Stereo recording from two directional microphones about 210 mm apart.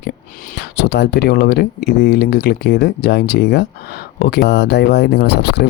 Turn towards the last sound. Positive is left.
turn(degrees=50)  # may be behind; listen again after turning